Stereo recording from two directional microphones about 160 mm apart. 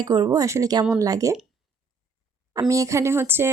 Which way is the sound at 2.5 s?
20° right (ahead or behind).